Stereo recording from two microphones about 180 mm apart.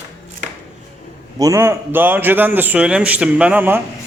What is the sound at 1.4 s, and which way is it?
A man's voice, 15° right (ahead or behind).